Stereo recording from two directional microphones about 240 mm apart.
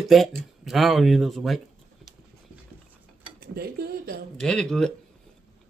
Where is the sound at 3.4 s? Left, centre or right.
Right.